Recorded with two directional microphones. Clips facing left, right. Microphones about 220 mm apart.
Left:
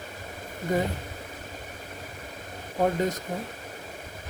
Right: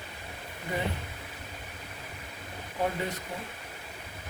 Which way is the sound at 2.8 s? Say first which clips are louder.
Left 6 dB; 45° left (ahead or behind).